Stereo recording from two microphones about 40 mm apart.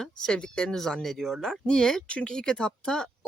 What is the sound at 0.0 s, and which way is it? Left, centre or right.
Speech, centre.